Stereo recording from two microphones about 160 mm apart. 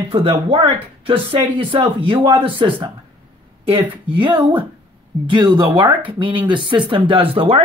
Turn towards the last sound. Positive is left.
turn(degrees=-35)  # may be behind; listen again after turning